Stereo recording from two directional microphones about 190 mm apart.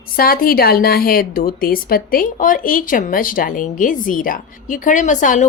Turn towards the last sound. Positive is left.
turn(degrees=40)  # may be behind; listen again after turning